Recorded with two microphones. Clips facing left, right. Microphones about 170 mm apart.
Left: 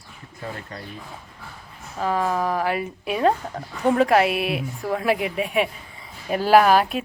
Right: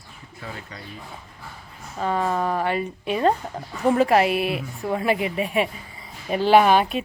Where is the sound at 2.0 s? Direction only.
Centre (ahead or behind).